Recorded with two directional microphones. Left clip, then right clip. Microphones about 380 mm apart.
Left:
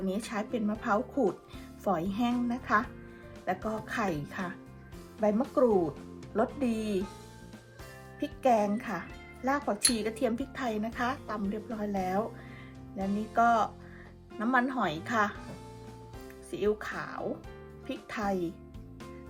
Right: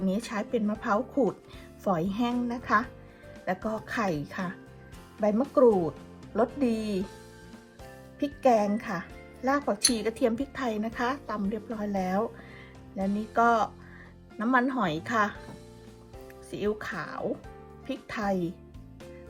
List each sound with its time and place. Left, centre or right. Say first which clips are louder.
0.1 s speech: right 5 dB; centre
8.2 s speech: right 3 dB; centre
16.5 s speech: even; centre